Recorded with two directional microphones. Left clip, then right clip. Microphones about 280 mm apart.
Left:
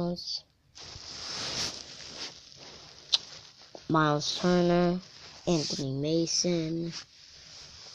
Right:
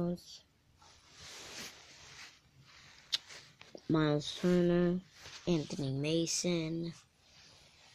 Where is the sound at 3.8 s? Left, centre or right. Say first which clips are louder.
Left 6 dB; centre.